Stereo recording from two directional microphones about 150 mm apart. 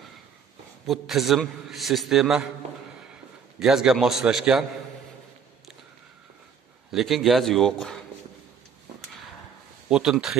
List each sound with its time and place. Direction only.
0.8 s a man's voice: centre (ahead or behind)
3.5 s a man's voice: 5° right (ahead or behind)
6.9 s a man's voice: centre (ahead or behind)
9.8 s a man's voice: 5° right (ahead or behind)